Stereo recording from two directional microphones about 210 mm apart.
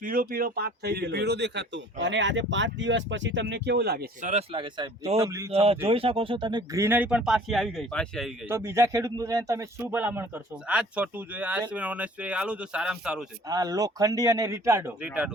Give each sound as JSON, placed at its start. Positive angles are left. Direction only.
{"t": 0.0, "sound": "speech", "side_deg": -40}
{"t": 4.3, "sound": "speech", "side_deg": -30}
{"t": 8.4, "sound": "speech", "side_deg": -10}
{"t": 13.5, "sound": "speech", "side_deg": -15}